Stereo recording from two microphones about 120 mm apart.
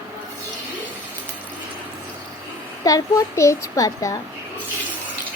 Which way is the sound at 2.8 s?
25° left (ahead or behind).